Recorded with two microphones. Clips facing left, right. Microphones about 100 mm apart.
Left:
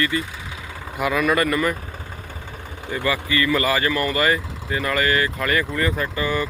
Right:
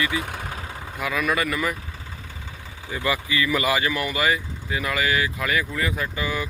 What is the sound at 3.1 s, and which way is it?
Speech, 15° right (ahead or behind).